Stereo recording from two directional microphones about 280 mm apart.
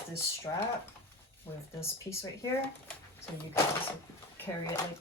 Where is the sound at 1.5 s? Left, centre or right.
Centre.